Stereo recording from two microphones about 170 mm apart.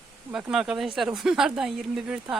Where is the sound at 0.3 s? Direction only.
5° right (ahead or behind).